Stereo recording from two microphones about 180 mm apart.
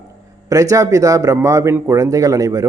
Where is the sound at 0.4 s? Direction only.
20° right (ahead or behind).